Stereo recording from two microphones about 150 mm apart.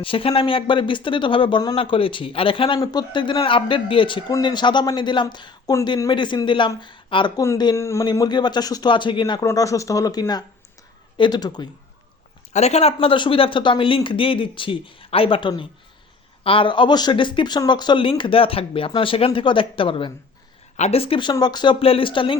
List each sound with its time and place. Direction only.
0.0 s speech: 35° left (ahead or behind)
9.5 s speech: 20° left (ahead or behind)
12.5 s speech: 45° left (ahead or behind)
20.7 s speech: 45° left (ahead or behind)